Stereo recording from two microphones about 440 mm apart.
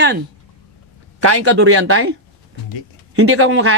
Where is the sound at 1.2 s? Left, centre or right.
Right.